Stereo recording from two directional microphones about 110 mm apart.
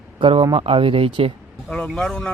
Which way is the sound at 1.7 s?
5° left (ahead or behind).